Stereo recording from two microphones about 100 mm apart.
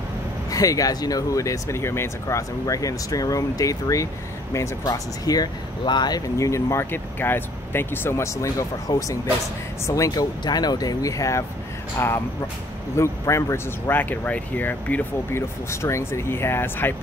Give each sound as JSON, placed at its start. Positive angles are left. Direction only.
{"t": 0.5, "sound": "speech", "side_deg": 35}
{"t": 10.4, "sound": "speech", "side_deg": 45}
{"t": 12.9, "sound": "speech", "side_deg": 30}